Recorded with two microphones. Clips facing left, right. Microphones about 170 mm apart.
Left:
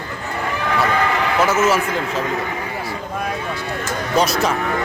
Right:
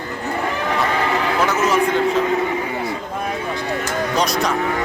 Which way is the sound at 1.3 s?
Centre (ahead or behind).